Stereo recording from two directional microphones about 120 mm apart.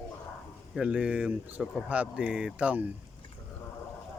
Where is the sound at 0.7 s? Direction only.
10° right (ahead or behind).